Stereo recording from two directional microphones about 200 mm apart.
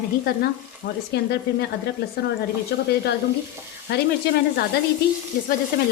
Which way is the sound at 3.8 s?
55° left (ahead or behind).